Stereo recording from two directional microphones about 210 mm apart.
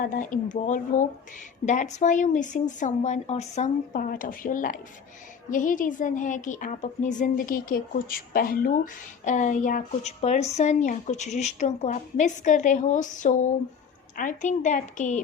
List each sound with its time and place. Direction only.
0.0 s a woman's voice: 40° left (ahead or behind)